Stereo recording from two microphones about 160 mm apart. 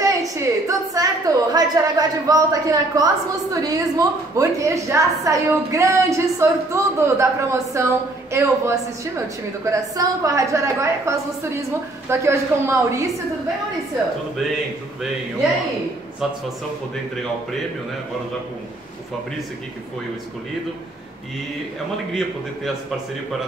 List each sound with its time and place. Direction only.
0.0 s a woman's voice: 20° right (ahead or behind)